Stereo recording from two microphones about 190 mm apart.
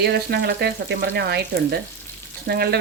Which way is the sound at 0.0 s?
60° right (ahead or behind).